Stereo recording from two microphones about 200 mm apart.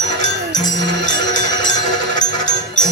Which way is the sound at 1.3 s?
20° left (ahead or behind).